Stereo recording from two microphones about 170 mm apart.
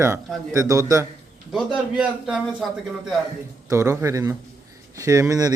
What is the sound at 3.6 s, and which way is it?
A man's voice, 15° right (ahead or behind).